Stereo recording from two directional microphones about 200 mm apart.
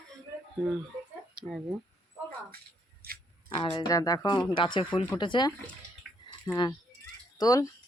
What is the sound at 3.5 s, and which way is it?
Speech, 25° left (ahead or behind).